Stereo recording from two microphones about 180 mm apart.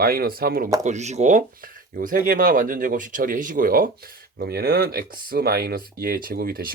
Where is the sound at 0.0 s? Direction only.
55° right (ahead or behind).